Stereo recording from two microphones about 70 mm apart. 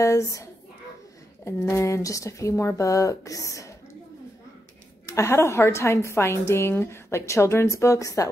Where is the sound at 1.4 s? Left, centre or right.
Left.